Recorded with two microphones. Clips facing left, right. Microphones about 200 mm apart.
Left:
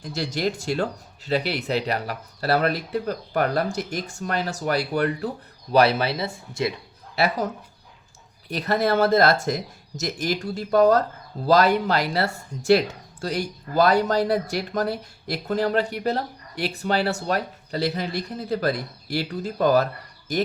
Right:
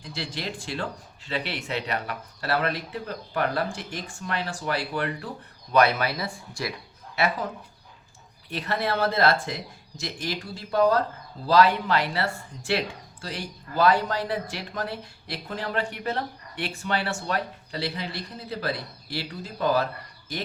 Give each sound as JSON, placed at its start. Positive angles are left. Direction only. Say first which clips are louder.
{"t": 0.0, "sound": "speech", "louder": "left 8 dB", "side_deg": 45}
{"t": 7.2, "sound": "speech", "louder": "left 3 dB", "side_deg": 40}